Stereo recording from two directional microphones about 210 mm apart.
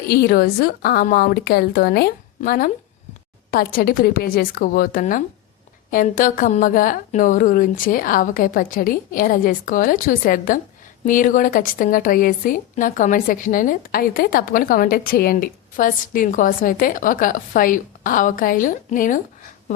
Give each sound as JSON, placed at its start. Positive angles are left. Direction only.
{"t": 0.1, "sound": "a woman's voice", "side_deg": 45}